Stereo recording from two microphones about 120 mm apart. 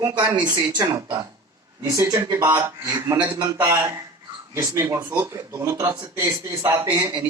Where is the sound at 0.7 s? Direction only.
25° right (ahead or behind).